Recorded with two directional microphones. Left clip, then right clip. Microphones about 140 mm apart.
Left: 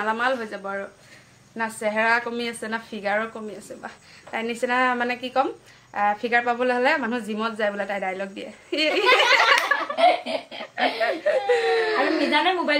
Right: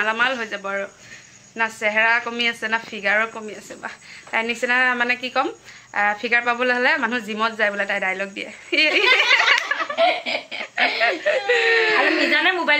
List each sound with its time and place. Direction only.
0.0 s a woman's voice: centre (ahead or behind)
10.6 s a woman's voice: 20° right (ahead or behind)
12.3 s a woman's voice: 20° left (ahead or behind)